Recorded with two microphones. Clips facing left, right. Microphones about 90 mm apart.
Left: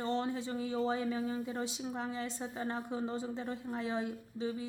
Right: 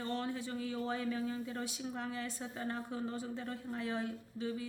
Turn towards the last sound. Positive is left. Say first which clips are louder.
# left 2 dB
turn(degrees=20)  # may be behind; listen again after turning